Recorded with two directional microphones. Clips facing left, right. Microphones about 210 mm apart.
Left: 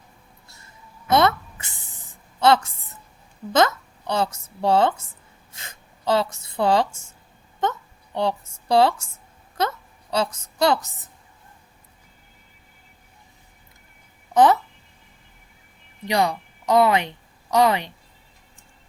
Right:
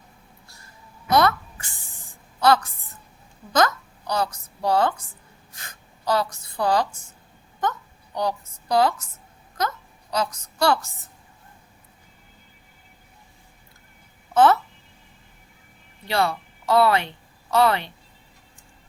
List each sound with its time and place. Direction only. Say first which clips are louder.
0.4 s a sound: left 2 dB; 25° left (ahead or behind)
2.4 s a woman's voice: left 1 dB; 25° left (ahead or behind)
5.5 s a sound: left 1 dB; 25° left (ahead or behind)
7.6 s a woman's voice: left 2 dB; 25° left (ahead or behind)
14.3 s a child's voice: left 1 dB; 15° left (ahead or behind)
16.0 s a woman's voice: left 2 dB; 15° left (ahead or behind)